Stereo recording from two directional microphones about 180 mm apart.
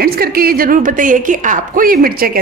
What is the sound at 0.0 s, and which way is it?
A woman's voice, 55° right (ahead or behind).